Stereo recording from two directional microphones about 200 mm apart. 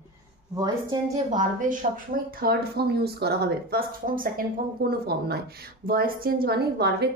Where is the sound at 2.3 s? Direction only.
50° right (ahead or behind).